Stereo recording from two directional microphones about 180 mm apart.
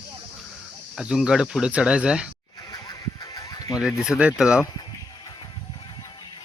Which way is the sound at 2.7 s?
20° left (ahead or behind).